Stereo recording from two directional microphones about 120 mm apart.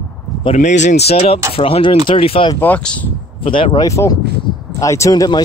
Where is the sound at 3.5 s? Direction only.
45° left (ahead or behind).